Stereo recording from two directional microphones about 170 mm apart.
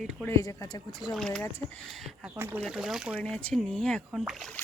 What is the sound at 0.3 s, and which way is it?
Speech, 15° left (ahead or behind).